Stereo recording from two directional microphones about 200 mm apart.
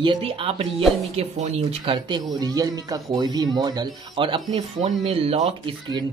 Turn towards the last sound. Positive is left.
turn(degrees=-25)  # may be behind; listen again after turning